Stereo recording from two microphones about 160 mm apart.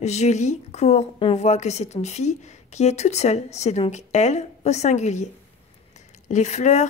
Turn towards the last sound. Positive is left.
turn(degrees=45)  # may be behind; listen again after turning